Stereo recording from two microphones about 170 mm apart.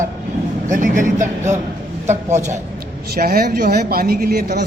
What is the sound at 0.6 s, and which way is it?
Speech, 50° right (ahead or behind).